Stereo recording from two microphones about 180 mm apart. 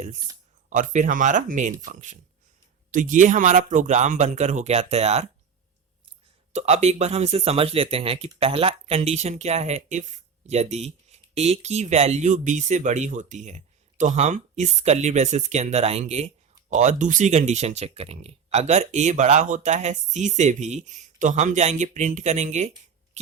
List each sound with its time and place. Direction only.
0.7 s speech: 45° right (ahead or behind)
6.5 s speech: 40° right (ahead or behind)
23.2 s a sound: 40° right (ahead or behind)